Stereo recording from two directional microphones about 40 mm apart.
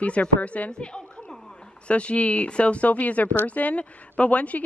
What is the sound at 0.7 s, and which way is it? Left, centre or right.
A woman's voice, left.